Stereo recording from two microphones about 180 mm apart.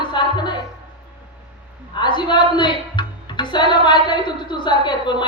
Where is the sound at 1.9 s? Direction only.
25° left (ahead or behind).